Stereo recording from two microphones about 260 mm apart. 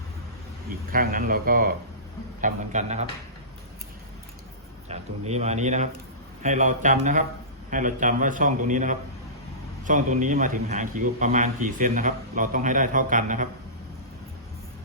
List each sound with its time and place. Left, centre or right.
0.9 s a man's voice: right
4.9 s a man's voice: right